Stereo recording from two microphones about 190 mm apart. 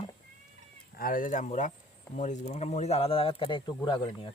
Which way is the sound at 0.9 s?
45° left (ahead or behind).